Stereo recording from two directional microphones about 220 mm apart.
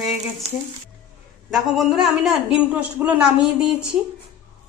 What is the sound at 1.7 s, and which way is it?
A woman's voice, centre (ahead or behind).